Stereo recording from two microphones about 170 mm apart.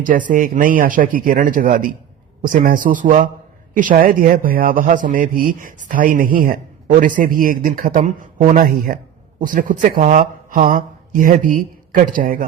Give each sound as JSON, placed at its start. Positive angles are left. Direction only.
{"t": 0.0, "sound": "a man's voice", "side_deg": -50}